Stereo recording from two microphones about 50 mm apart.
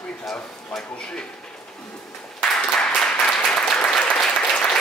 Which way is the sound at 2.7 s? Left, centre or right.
Centre.